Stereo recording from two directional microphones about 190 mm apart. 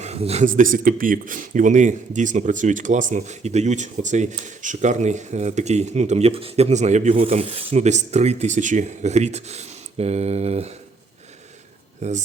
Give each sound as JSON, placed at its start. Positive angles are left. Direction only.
{"t": 0.0, "sound": "speech", "side_deg": -35}
{"t": 12.0, "sound": "speech", "side_deg": -35}